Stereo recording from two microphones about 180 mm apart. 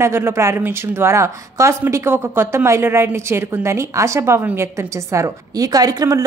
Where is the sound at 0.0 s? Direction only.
15° right (ahead or behind).